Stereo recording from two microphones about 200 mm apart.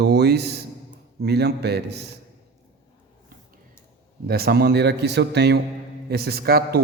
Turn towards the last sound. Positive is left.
turn(degrees=-50)  # may be behind; listen again after turning